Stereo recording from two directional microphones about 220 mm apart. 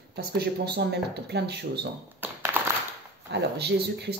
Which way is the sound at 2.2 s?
10° right (ahead or behind).